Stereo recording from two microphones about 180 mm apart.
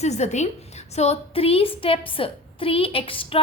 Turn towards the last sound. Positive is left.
turn(degrees=30)  # may be behind; listen again after turning